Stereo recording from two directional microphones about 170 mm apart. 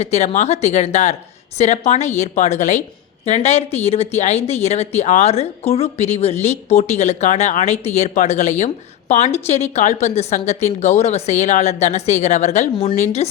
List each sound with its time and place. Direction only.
0.0 s speech: 40° left (ahead or behind)